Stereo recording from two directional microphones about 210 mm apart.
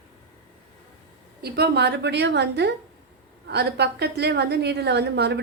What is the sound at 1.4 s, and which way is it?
A woman's voice, 50° right (ahead or behind).